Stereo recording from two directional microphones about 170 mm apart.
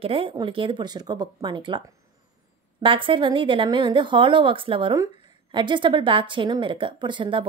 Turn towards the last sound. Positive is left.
turn(degrees=-30)  # may be behind; listen again after turning